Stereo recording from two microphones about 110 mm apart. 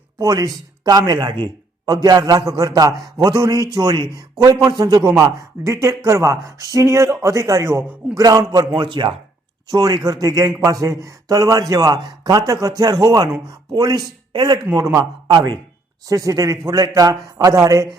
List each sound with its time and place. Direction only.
0.2 s a man's voice: 35° right (ahead or behind)